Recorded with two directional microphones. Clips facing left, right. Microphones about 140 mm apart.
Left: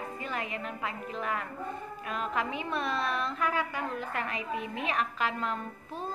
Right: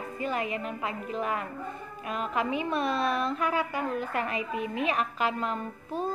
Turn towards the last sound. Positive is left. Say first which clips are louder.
# right 3 dB
turn(degrees=-10)  # may be behind; listen again after turning